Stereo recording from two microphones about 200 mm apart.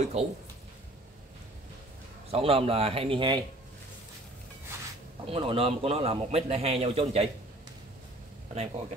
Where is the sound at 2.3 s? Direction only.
30° right (ahead or behind).